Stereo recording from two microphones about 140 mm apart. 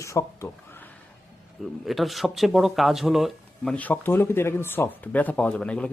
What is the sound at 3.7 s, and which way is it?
Speech, 10° left (ahead or behind).